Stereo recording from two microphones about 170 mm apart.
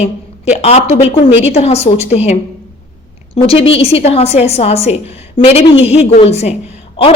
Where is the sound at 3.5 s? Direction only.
35° left (ahead or behind).